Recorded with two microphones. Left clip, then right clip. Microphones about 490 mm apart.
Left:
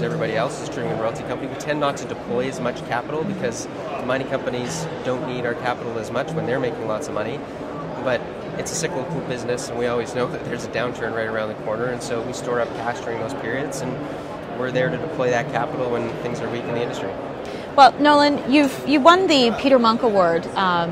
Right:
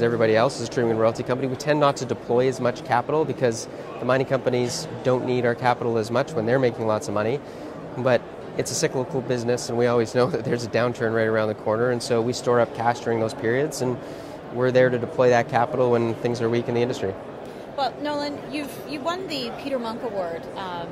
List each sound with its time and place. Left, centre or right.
0.0 s speech: right
4.1 s speech: right
14.6 s speech: right
17.7 s a woman's voice: left